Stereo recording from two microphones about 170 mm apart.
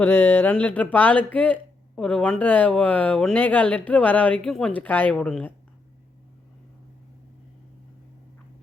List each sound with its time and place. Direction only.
0.0 s speech: 10° left (ahead or behind)